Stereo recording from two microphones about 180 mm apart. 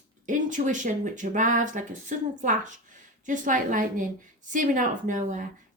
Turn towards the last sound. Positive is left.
turn(degrees=-45)  # may be behind; listen again after turning